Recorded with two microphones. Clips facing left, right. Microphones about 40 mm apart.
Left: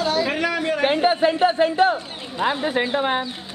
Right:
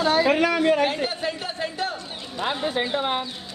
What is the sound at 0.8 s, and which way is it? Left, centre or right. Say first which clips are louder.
Speech: left 7 dB; left.